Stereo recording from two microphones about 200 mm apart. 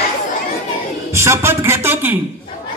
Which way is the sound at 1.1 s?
15° right (ahead or behind).